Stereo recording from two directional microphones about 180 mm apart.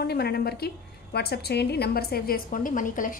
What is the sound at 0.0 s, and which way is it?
A woman's voice, 60° left (ahead or behind).